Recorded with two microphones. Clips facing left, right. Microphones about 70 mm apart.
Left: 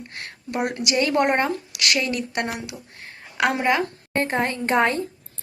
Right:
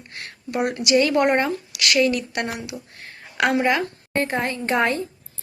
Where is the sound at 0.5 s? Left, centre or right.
Left.